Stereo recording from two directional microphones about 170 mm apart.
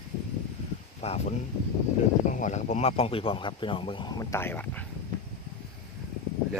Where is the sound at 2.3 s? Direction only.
45° left (ahead or behind); by 4.8 s 10° left (ahead or behind).